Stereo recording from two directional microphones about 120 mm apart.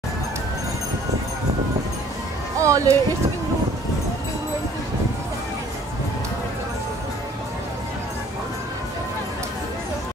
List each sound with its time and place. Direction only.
2.6 s speech: 25° right (ahead or behind)